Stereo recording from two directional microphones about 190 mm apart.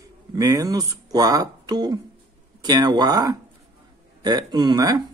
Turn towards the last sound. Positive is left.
turn(degrees=-20)  # may be behind; listen again after turning